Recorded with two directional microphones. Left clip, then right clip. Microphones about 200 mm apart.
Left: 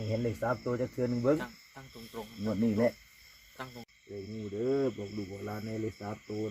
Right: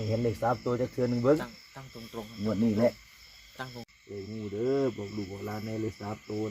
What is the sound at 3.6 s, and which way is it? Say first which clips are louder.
Speech: right 3 dB; 55° right (ahead or behind).